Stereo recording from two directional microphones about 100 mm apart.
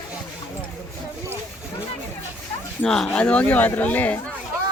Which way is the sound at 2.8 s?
5° left (ahead or behind).